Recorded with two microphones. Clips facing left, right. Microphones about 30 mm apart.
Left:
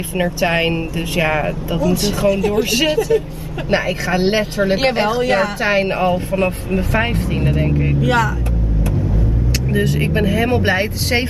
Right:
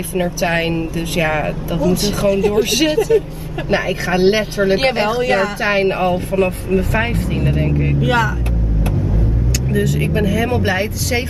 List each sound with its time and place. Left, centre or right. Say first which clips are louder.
0.1 s speech: even; centre
1.8 s speech: right 1 dB; centre
7.1 s speech: even; left
7.3 s speech: even; centre
9.7 s speech: even; centre